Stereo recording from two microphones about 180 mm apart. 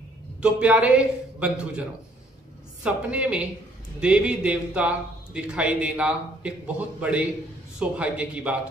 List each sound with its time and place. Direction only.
0.4 s a man's voice: 5° right (ahead or behind)